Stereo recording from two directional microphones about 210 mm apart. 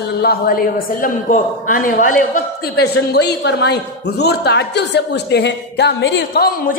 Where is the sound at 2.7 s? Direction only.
50° left (ahead or behind).